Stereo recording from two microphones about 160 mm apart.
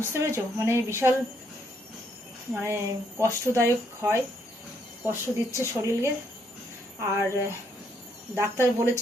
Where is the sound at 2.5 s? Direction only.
15° right (ahead or behind).